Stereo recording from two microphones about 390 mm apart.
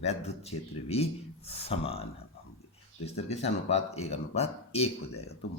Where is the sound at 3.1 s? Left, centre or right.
Centre.